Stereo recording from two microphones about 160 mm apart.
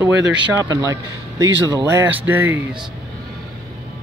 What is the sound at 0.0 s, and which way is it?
Speech, 5° right (ahead or behind).